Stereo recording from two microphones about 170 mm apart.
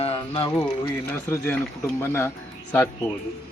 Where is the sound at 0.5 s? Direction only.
10° left (ahead or behind).